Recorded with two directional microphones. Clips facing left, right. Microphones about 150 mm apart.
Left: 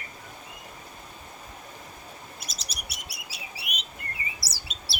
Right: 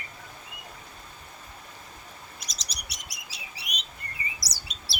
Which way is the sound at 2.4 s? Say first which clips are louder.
Left 2 dB; 5° left (ahead or behind).